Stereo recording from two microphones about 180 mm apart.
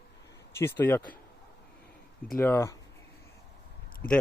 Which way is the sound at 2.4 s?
15° left (ahead or behind).